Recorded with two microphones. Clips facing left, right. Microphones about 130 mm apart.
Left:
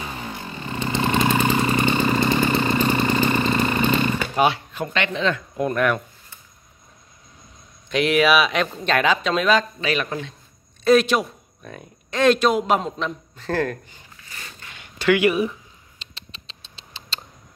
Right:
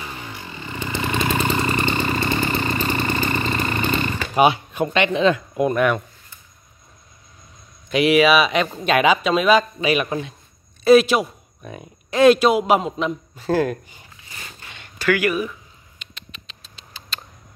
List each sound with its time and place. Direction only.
0.1 s a sound: 35° left (ahead or behind)
0.7 s vehicle: 20° left (ahead or behind)
3.6 s a sound: centre (ahead or behind)
4.4 s speech: 15° right (ahead or behind)
7.9 s speech: 5° right (ahead or behind)
15.0 s speech: 25° left (ahead or behind)
16.0 s rodents: 30° left (ahead or behind)